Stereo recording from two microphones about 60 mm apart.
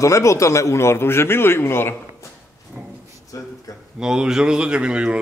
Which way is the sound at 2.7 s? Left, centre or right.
Right.